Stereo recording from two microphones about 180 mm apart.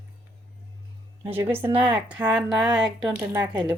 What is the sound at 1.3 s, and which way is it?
Speech, 10° right (ahead or behind).